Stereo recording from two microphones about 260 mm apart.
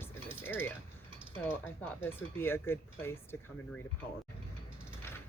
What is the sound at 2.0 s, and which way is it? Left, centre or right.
Speech, centre.